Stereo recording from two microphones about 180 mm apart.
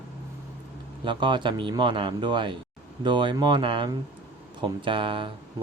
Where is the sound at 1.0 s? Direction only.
25° right (ahead or behind).